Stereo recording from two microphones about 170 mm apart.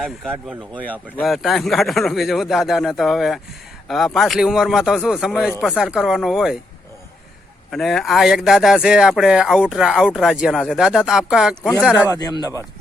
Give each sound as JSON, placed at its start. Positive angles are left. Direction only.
{"t": 0.0, "sound": "speech", "side_deg": 0}
{"t": 7.7, "sound": "speech", "side_deg": 0}
{"t": 12.1, "sound": "speech", "side_deg": 25}